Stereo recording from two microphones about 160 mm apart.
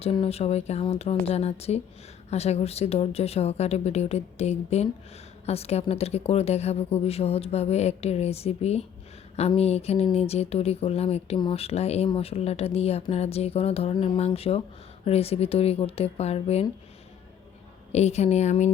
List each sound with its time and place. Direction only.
0.0 s a woman's voice: 40° left (ahead or behind)
17.9 s a woman's voice: 45° left (ahead or behind)